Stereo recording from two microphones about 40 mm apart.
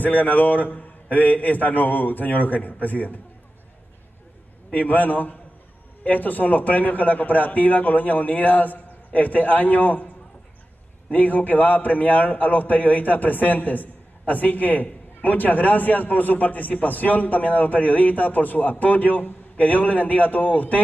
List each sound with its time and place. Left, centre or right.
0.0 s a man's voice: left
4.7 s a man's voice: left